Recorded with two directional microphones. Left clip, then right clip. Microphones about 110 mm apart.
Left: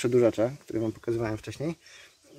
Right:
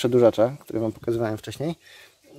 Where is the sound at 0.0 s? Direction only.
20° right (ahead or behind).